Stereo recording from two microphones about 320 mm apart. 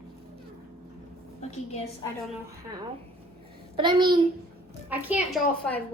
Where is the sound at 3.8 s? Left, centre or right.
Centre.